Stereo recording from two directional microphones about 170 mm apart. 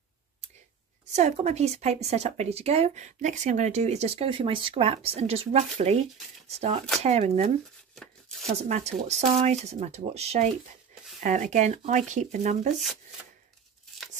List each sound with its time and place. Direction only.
1.1 s speech: 40° right (ahead or behind)
7.9 s a sound: centre (ahead or behind)
8.5 s speech: 40° right (ahead or behind)